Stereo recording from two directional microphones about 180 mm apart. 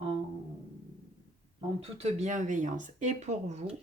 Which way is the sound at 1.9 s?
35° right (ahead or behind).